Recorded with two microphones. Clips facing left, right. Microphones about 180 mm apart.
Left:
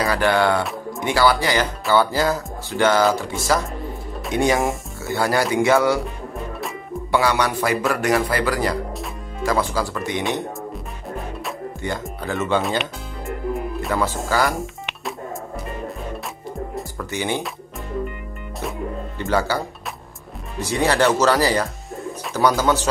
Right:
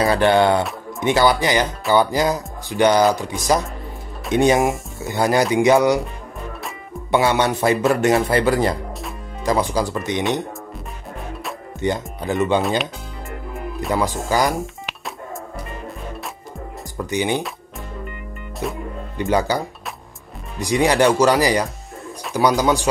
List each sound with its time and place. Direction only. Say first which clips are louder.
0.0 s speech: right 3 dB; 25° right (ahead or behind)
7.1 s speech: right 2 dB; 25° right (ahead or behind)
11.8 s speech: right 7 dB; 20° right (ahead or behind)
13.9 s speech: right 2 dB; 15° right (ahead or behind)
14.6 s music: even; centre (ahead or behind)
16.9 s speech: right 5 dB; 15° right (ahead or behind)
18.6 s music: right 3 dB; centre (ahead or behind)
19.1 s speech: right 3 dB; 15° right (ahead or behind)